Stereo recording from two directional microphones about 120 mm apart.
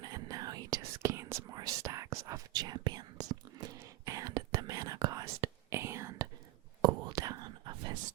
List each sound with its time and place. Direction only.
0.0 s whispering: 30° right (ahead or behind)